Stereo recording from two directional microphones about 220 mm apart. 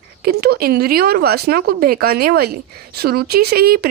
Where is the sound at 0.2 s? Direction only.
45° right (ahead or behind).